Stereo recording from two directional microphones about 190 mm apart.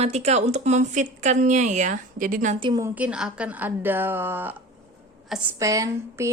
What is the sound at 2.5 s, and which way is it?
Speech, 25° right (ahead or behind).